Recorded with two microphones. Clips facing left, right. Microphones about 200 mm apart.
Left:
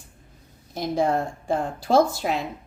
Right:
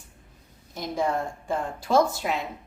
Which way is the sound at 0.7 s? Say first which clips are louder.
Left 4 dB; 35° left (ahead or behind).